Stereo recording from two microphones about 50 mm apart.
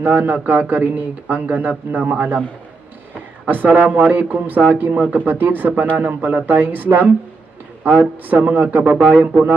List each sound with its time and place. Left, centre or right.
0.0 s speech: right
3.4 s speech: right
5.2 s speech: right
8.5 s speech: right